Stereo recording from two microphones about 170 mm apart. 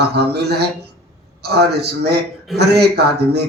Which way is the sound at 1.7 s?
75° right (ahead or behind).